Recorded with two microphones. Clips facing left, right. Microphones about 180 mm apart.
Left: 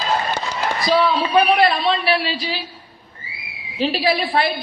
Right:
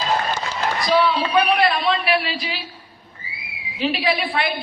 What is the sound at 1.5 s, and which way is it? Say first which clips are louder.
A woman's voice: left 2 dB; 30° left (ahead or behind).